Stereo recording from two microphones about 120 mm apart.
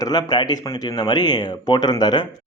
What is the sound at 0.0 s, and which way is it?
A man's voice, 35° left (ahead or behind).